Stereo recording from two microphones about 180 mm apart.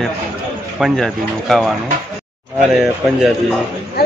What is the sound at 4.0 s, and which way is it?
Speech, 60° left (ahead or behind).